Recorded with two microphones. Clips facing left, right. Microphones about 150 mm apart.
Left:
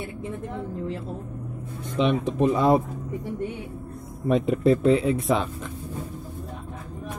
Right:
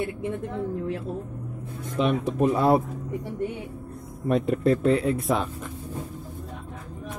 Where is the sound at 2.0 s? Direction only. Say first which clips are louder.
Left 1 dB; 5° right (ahead or behind).